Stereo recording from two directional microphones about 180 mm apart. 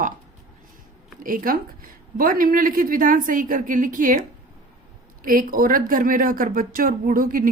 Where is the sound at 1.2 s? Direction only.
50° right (ahead or behind).